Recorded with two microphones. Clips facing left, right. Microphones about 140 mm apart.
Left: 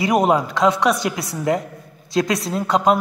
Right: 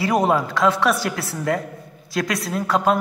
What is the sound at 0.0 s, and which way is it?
A woman's voice, 15° left (ahead or behind).